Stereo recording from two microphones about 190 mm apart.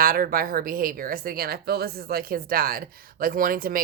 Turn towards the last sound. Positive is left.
turn(degrees=-50)  # may be behind; listen again after turning